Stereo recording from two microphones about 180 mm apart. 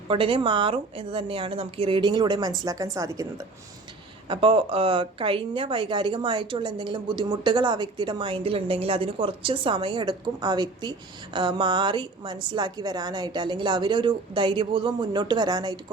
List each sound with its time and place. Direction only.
0.1 s a woman's voice: 30° right (ahead or behind)
4.3 s a woman's voice: 30° right (ahead or behind)